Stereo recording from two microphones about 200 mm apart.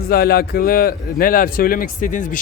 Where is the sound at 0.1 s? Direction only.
50° left (ahead or behind).